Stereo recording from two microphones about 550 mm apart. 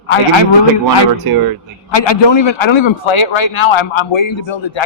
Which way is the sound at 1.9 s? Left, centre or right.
Left.